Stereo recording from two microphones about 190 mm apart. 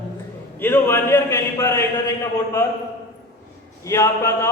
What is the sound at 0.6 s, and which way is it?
A man's voice, 10° left (ahead or behind).